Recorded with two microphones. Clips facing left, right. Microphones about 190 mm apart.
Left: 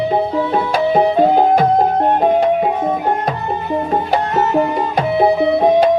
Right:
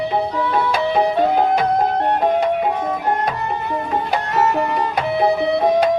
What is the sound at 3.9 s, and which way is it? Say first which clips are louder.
Music: left 3 dB; 30° left (ahead or behind).